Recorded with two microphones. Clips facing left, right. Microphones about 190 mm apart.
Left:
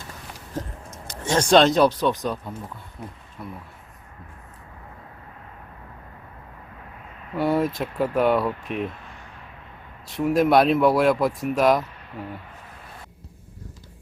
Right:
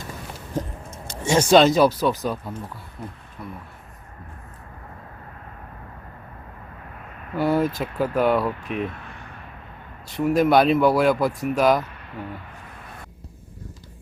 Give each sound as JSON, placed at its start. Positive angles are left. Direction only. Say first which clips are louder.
{"t": 0.9, "sound": "a sound", "louder": "right 2 dB", "side_deg": -25}
{"t": 1.2, "sound": "speech", "louder": "right 2 dB", "side_deg": -10}
{"t": 3.4, "sound": "speech", "louder": "even", "side_deg": 0}
{"t": 7.3, "sound": "speech", "louder": "right 1 dB", "side_deg": 0}
{"t": 10.1, "sound": "speech", "louder": "right 1 dB", "side_deg": 0}